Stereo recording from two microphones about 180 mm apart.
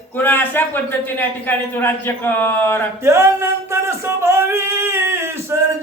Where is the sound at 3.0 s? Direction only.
15° right (ahead or behind).